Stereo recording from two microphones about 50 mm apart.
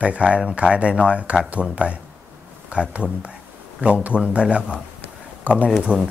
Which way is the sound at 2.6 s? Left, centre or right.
Right.